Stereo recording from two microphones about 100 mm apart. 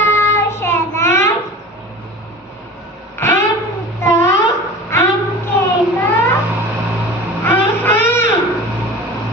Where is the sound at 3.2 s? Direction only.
25° left (ahead or behind).